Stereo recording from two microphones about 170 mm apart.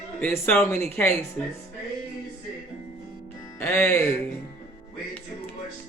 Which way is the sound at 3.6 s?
15° left (ahead or behind).